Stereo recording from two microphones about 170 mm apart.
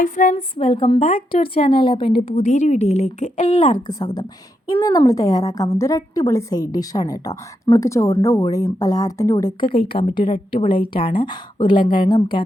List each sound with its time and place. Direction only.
0.0 s a sound: 50° left (ahead or behind)
0.3 s a woman's voice: 35° left (ahead or behind)
3.8 s a woman's voice: 25° left (ahead or behind)